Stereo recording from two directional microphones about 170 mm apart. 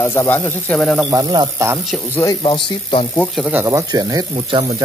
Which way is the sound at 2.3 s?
30° left (ahead or behind).